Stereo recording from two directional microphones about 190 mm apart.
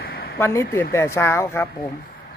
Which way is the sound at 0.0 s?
55° left (ahead or behind).